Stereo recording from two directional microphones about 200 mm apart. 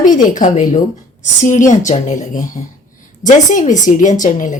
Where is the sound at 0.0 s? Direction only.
40° left (ahead or behind).